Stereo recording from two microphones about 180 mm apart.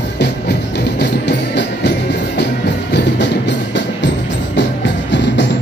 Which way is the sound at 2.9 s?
75° left (ahead or behind).